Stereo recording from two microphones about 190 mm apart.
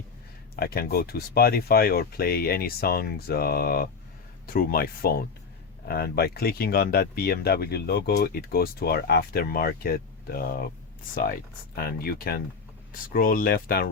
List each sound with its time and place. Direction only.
0.5 s speech: 55° left (ahead or behind)
11.1 s speech: 45° left (ahead or behind)